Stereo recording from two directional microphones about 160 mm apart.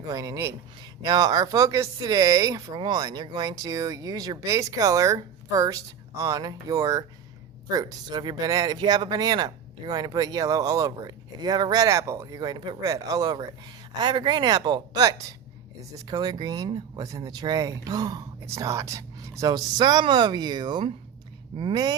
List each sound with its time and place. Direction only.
0.0 s speech: 20° right (ahead or behind)